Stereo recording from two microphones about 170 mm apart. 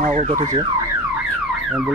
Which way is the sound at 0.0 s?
40° right (ahead or behind).